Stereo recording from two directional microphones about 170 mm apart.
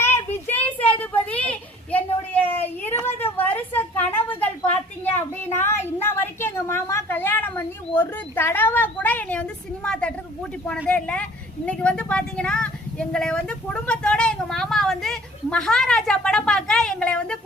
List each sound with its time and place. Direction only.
0.0 s a sound: 10° left (ahead or behind)
7.9 s a woman's voice: 10° left (ahead or behind)
10.8 s vehicle: 5° left (ahead or behind)